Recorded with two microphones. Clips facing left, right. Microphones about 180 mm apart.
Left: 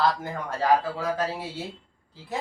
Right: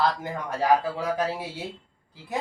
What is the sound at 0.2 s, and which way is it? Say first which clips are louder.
A man's voice: right 1 dB; 15° right (ahead or behind).